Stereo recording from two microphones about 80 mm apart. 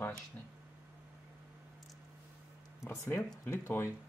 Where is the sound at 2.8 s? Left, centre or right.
Left.